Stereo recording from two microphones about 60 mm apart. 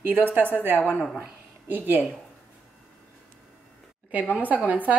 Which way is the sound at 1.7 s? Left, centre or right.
Right.